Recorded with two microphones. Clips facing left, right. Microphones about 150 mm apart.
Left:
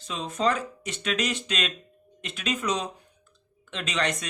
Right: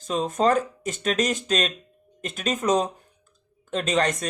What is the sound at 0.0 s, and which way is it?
Speech, 45° right (ahead or behind).